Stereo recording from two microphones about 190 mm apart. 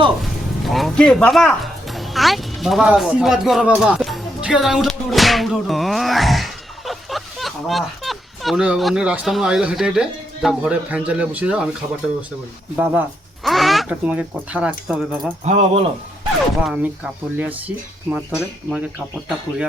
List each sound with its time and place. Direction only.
0.6 s speech: centre (ahead or behind)
12.7 s speech: 10° right (ahead or behind)
15.4 s speech: 35° right (ahead or behind)
16.6 s speech: 5° right (ahead or behind)